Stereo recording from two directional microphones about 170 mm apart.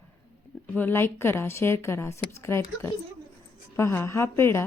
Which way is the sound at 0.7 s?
10° left (ahead or behind).